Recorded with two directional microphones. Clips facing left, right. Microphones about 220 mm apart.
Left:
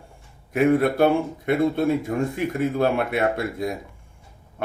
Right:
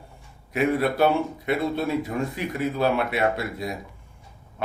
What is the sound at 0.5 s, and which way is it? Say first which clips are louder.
Speech: left 4 dB; 50° left (ahead or behind).